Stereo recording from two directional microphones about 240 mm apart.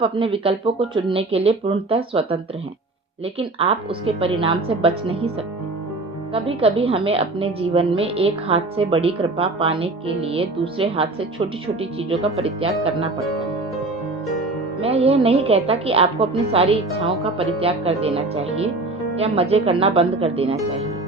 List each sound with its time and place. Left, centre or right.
0.0 s a woman's voice: right
6.3 s a woman's voice: right
14.8 s a woman's voice: right